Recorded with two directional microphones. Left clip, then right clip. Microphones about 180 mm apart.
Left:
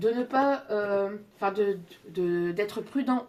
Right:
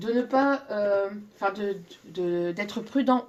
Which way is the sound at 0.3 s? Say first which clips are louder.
Right 1 dB; 35° right (ahead or behind).